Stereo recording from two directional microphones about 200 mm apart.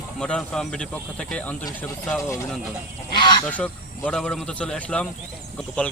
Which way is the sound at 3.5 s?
5° left (ahead or behind).